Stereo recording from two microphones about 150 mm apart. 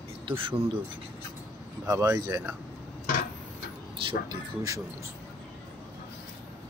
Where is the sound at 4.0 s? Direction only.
35° right (ahead or behind).